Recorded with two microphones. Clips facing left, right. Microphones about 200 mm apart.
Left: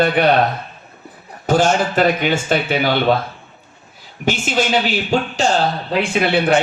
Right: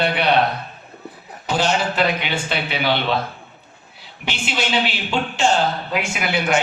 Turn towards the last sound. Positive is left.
turn(degrees=30)  # may be behind; listen again after turning